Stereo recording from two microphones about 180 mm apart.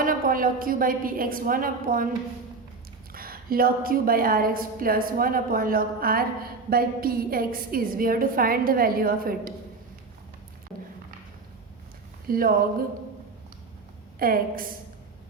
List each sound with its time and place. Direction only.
0.0 s a woman's voice: 50° right (ahead or behind)
3.1 s a woman's voice: 55° right (ahead or behind)
12.3 s a woman's voice: 55° right (ahead or behind)
14.2 s a woman's voice: 55° right (ahead or behind)